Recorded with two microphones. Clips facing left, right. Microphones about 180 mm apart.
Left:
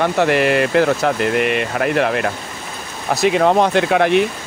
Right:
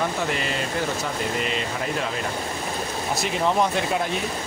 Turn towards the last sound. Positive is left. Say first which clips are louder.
# left 11 dB
turn(degrees=85)